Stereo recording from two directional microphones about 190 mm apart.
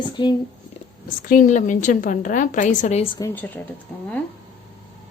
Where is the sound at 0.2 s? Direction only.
25° left (ahead or behind).